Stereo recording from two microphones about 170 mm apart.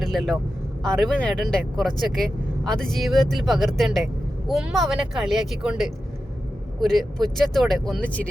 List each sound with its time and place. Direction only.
0.0 s speech: centre (ahead or behind)